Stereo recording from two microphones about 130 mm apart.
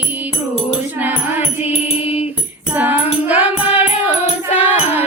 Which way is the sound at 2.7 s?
15° right (ahead or behind).